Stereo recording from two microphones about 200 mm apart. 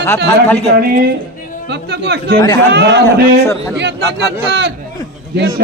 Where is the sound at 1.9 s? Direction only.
55° right (ahead or behind).